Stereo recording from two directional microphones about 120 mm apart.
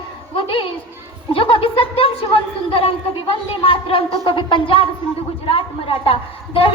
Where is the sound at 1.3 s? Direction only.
50° left (ahead or behind).